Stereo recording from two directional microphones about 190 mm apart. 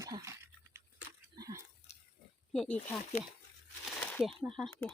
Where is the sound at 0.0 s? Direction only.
15° right (ahead or behind).